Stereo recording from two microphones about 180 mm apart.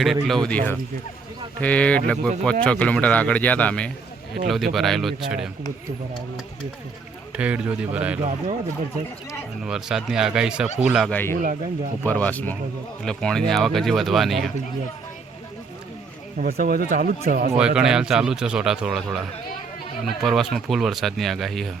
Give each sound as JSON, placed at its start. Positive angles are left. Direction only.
{"t": 0.0, "sound": "a man's voice", "side_deg": 0}
{"t": 7.3, "sound": "a man's voice", "side_deg": -5}
{"t": 8.2, "sound": "speech", "side_deg": -35}
{"t": 9.6, "sound": "speech", "side_deg": -5}
{"t": 11.1, "sound": "a man's voice", "side_deg": 10}
{"t": 16.4, "sound": "speech", "side_deg": -55}
{"t": 17.7, "sound": "speech", "side_deg": -5}